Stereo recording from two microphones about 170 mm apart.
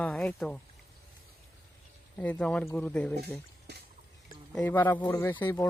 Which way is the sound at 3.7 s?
75° right (ahead or behind).